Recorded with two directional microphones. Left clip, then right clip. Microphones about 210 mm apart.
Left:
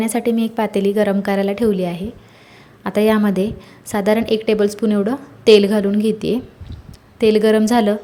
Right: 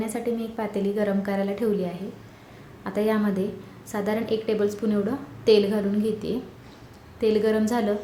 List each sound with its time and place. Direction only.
0.0 s a woman's voice: 40° left (ahead or behind)